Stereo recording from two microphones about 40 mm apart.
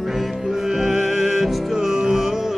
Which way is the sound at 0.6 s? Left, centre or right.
Centre.